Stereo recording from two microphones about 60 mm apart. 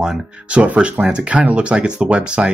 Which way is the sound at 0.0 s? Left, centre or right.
Centre.